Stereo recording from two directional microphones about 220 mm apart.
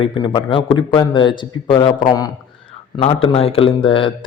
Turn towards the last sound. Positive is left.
turn(degrees=25)  # may be behind; listen again after turning